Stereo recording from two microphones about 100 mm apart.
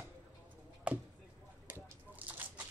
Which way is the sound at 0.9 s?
10° right (ahead or behind).